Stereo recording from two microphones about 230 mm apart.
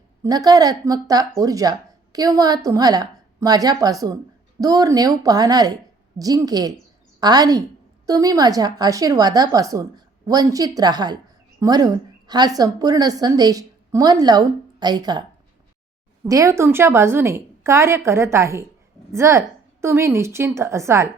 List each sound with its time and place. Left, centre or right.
0.2 s a woman's voice: centre
16.2 s a woman's voice: centre